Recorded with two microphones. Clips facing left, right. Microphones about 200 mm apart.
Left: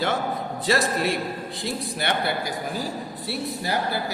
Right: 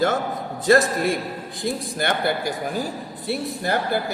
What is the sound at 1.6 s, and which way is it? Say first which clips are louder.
Speech: right 4 dB; 50° right (ahead or behind).